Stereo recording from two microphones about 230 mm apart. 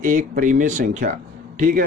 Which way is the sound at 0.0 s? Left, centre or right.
Right.